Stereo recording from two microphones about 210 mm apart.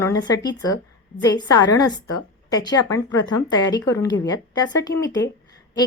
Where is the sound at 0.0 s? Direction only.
20° left (ahead or behind).